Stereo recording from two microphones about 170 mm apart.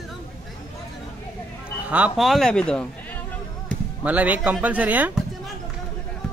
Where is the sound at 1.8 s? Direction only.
10° right (ahead or behind).